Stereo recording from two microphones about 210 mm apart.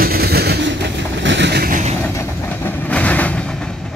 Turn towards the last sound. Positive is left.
turn(degrees=5)  # may be behind; listen again after turning